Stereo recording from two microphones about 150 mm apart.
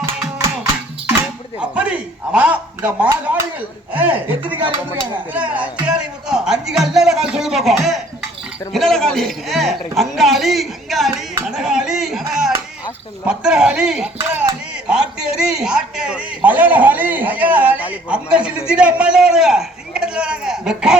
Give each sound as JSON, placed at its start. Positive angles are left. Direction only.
{"t": 0.3, "sound": "music", "side_deg": -20}
{"t": 1.5, "sound": "a sound", "side_deg": -5}
{"t": 3.9, "sound": "a man's voice", "side_deg": -10}
{"t": 11.4, "sound": "a sound", "side_deg": -5}
{"t": 12.3, "sound": "music", "side_deg": 0}
{"t": 13.2, "sound": "a man's voice", "side_deg": -5}